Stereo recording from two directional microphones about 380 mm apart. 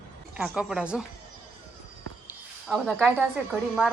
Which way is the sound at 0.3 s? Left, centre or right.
Centre.